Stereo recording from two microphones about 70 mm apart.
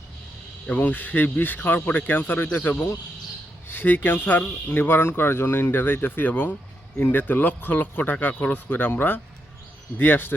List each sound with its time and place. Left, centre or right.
0.8 s speech: left